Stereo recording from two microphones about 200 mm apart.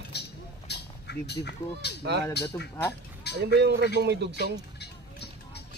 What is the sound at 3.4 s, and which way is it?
Speech, 55° right (ahead or behind).